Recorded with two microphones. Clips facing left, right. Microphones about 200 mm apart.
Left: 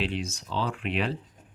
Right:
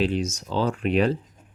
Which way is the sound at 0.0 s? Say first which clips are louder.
Right 7 dB; 45° right (ahead or behind).